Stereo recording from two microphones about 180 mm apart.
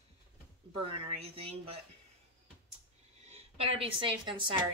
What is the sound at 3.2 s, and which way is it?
A woman's voice, 35° right (ahead or behind).